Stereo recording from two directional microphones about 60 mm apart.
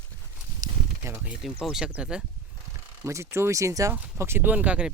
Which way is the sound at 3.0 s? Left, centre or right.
Right.